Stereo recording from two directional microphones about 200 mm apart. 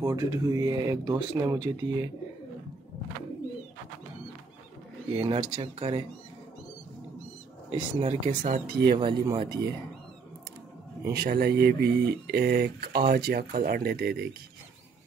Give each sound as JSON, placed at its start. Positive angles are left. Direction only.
{"t": 0.0, "sound": "speech", "side_deg": -15}
{"t": 5.1, "sound": "speech", "side_deg": -25}
{"t": 8.0, "sound": "speech", "side_deg": -30}
{"t": 8.5, "sound": "speech", "side_deg": -50}
{"t": 8.9, "sound": "speech", "side_deg": -25}
{"t": 11.1, "sound": "speech", "side_deg": -50}